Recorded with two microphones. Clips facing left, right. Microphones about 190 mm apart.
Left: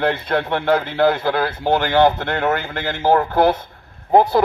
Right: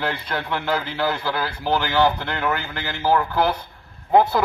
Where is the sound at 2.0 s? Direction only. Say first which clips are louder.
Left 4 dB; 55° left (ahead or behind).